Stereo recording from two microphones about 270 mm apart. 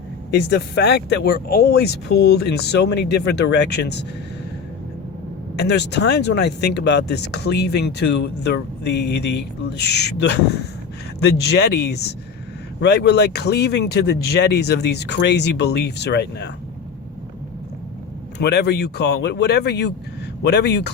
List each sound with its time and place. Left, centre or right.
0.3 s speech: left
5.5 s speech: left
18.3 s speech: left